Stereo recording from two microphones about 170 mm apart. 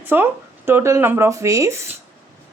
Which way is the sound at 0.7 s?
15° right (ahead or behind).